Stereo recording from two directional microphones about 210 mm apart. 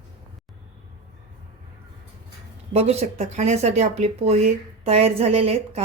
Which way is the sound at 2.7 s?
30° right (ahead or behind).